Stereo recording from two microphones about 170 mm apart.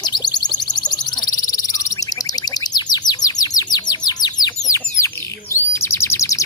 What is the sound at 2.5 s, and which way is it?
Bird, 25° left (ahead or behind).